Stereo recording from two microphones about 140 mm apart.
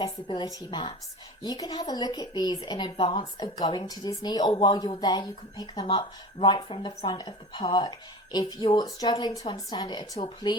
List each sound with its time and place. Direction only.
0.0 s speech: 35° left (ahead or behind)